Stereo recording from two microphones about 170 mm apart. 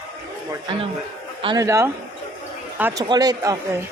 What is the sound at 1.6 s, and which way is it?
Speech, 15° right (ahead or behind).